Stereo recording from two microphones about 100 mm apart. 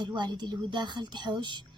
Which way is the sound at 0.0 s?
50° right (ahead or behind).